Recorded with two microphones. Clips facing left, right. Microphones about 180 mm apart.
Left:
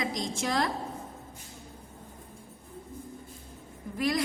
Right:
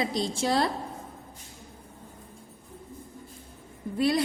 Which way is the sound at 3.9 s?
30° right (ahead or behind).